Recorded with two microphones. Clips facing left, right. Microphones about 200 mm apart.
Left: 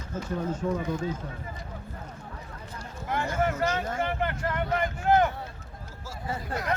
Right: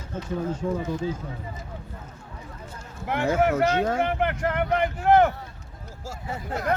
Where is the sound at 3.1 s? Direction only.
70° right (ahead or behind).